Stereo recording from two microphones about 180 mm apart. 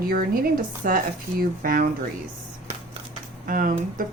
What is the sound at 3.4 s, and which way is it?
Speech, 50° right (ahead or behind).